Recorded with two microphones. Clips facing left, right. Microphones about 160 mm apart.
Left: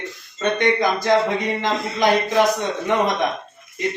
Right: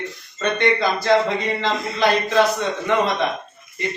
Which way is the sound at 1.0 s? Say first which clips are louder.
Right 2 dB; 15° left (ahead or behind).